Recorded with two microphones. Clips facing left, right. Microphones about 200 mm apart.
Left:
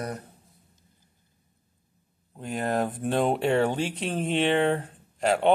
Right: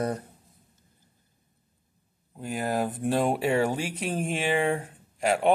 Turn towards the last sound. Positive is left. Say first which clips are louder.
# left 1 dB
turn(degrees=-10)  # may be behind; listen again after turning